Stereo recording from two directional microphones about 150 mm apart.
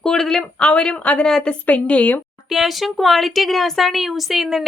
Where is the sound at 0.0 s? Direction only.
5° left (ahead or behind).